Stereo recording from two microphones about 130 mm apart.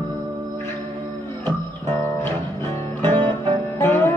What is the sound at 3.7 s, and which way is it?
Music, 20° left (ahead or behind).